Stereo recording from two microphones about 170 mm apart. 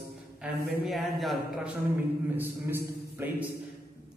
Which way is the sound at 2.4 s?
15° right (ahead or behind).